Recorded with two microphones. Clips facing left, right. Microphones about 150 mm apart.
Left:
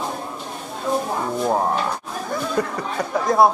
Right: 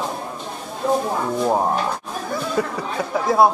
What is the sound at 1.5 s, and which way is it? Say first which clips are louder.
Speech: even; 10° right (ahead or behind).